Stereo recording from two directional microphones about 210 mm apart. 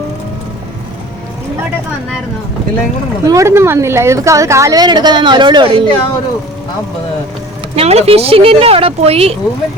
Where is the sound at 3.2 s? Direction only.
15° right (ahead or behind).